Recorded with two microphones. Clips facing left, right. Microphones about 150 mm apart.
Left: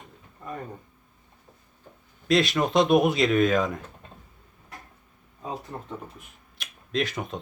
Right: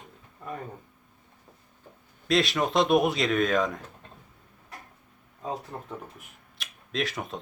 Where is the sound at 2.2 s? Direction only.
Centre (ahead or behind).